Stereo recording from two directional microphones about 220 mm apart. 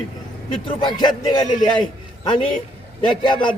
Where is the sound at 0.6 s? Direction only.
20° left (ahead or behind).